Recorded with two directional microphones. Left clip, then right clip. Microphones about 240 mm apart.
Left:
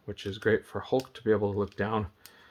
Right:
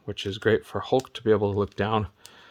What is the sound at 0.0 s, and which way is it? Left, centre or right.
Speech, right.